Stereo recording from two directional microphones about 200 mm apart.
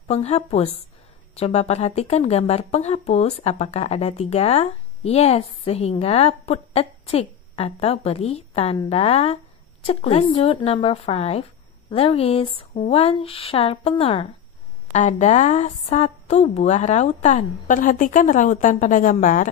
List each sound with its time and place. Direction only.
0.1 s speech: 30° left (ahead or behind)